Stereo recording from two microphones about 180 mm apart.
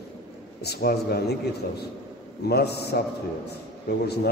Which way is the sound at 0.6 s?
60° left (ahead or behind).